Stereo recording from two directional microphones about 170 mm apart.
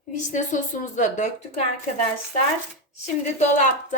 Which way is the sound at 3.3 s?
45° left (ahead or behind).